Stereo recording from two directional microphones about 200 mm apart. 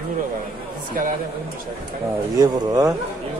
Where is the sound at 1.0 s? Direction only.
45° right (ahead or behind).